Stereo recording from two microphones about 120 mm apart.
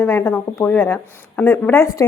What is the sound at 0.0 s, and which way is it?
Speech, 20° left (ahead or behind).